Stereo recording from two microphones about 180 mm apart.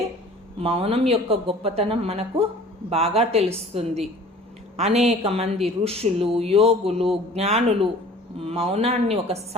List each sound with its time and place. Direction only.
0.6 s speech: 30° right (ahead or behind)